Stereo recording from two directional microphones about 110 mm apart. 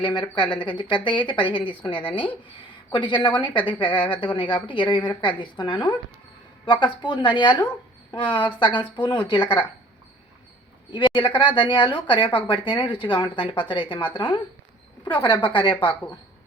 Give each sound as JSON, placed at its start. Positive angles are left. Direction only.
{"t": 0.0, "sound": "a woman's voice", "side_deg": 50}
{"t": 10.9, "sound": "a woman's voice", "side_deg": 45}